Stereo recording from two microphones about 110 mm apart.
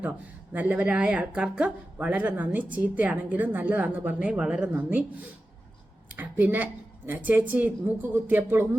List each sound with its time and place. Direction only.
0.5 s a woman's voice: 15° right (ahead or behind)